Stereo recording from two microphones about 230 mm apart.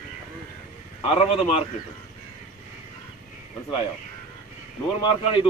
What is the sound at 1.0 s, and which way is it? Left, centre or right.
Speech, left.